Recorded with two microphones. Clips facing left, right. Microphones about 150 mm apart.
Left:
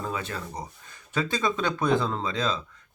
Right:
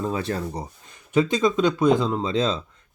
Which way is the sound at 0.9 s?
20° right (ahead or behind).